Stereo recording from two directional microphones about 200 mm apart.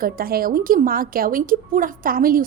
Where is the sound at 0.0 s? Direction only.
45° right (ahead or behind).